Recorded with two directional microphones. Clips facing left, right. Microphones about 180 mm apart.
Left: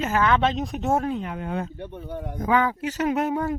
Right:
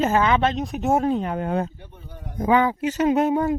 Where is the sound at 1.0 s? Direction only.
40° right (ahead or behind).